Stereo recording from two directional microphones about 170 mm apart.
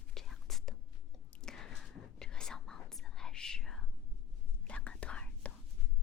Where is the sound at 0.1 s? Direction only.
Centre (ahead or behind).